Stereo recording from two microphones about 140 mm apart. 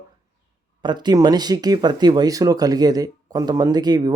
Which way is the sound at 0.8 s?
30° right (ahead or behind).